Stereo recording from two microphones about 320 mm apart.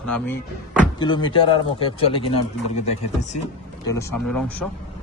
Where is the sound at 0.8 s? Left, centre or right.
Centre.